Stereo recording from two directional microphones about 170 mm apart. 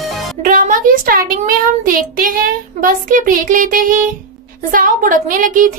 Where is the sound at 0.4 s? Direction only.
55° right (ahead or behind).